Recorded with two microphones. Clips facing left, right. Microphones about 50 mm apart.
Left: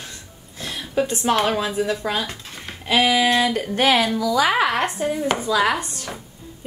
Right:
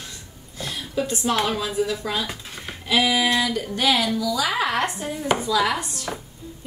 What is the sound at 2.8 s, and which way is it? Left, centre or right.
Speech, left.